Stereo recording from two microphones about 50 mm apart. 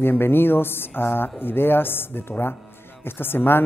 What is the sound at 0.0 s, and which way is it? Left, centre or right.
A woman's voice, left.